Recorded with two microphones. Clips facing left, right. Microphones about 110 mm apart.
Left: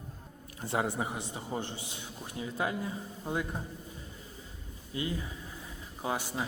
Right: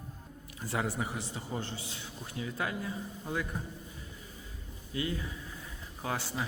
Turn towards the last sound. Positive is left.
turn(degrees=15)  # may be behind; listen again after turning